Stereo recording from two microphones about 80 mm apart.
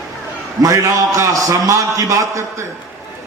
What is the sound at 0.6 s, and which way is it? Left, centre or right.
A man's voice, right.